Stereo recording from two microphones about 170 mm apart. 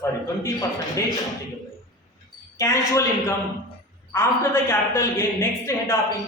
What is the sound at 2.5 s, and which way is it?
Speech, 20° left (ahead or behind).